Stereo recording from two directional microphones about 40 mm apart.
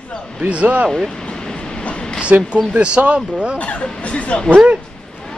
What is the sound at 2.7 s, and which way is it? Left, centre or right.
Speech, right.